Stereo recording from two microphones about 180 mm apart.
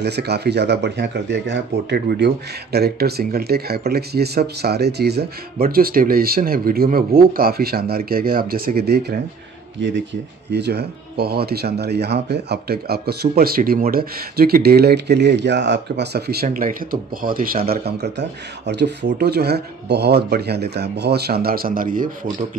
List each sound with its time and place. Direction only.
0.0 s speech: 65° right (ahead or behind)
9.8 s speech: 75° right (ahead or behind); by 22.1 s 50° right (ahead or behind)